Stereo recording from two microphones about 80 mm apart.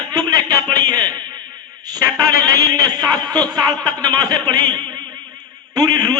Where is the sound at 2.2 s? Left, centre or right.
Right.